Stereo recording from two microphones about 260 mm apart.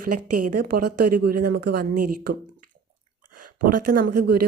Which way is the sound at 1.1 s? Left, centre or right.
Right.